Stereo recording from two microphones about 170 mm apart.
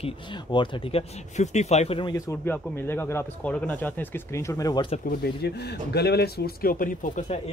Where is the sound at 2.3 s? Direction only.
15° left (ahead or behind).